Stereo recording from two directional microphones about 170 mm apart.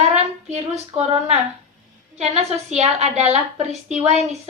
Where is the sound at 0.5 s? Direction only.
40° right (ahead or behind).